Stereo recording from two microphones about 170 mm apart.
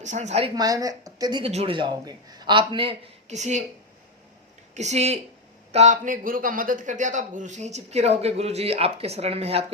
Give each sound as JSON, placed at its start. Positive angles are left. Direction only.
{"t": 0.0, "sound": "speech", "side_deg": -45}
{"t": 0.5, "sound": "speech", "side_deg": -20}
{"t": 4.7, "sound": "a man's voice", "side_deg": -40}